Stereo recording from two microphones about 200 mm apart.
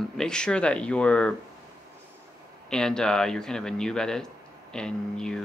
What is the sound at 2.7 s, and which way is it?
Speech, 5° left (ahead or behind).